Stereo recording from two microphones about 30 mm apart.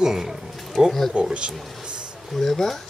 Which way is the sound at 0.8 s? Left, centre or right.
Right.